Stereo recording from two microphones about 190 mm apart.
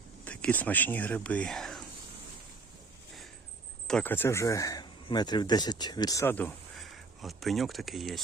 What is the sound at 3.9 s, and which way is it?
Speech, 5° left (ahead or behind).